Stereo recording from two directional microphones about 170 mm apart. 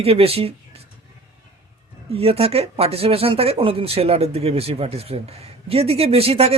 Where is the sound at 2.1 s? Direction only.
35° right (ahead or behind).